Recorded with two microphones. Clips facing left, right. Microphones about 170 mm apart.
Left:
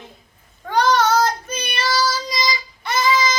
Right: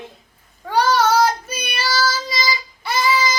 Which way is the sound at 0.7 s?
10° right (ahead or behind).